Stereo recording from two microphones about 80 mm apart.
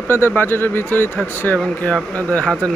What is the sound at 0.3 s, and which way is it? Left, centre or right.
Speech, left.